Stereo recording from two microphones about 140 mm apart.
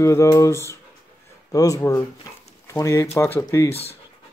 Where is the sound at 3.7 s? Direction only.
45° left (ahead or behind).